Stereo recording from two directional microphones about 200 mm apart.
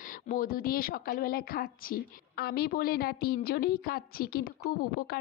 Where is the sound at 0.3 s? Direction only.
45° left (ahead or behind).